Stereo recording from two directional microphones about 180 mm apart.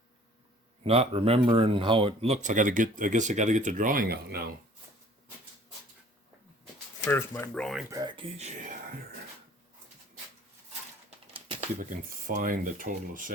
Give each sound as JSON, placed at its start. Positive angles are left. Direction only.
{"t": 0.9, "sound": "speech", "side_deg": -35}
{"t": 7.0, "sound": "speech", "side_deg": 10}
{"t": 7.9, "sound": "speech", "side_deg": -20}
{"t": 11.3, "sound": "a sound", "side_deg": -30}
{"t": 11.8, "sound": "speech", "side_deg": -45}